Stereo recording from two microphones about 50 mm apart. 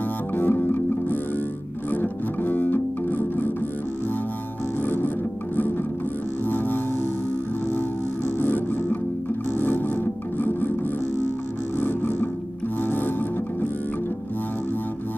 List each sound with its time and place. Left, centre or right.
0.4 s music: left
4.8 s music: left
6.4 s music: left
8.4 s music: left
11.8 s music: left